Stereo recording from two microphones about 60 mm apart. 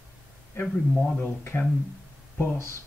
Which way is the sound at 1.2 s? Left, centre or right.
Left.